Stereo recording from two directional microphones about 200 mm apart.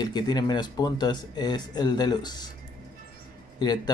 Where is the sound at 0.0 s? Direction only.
20° left (ahead or behind).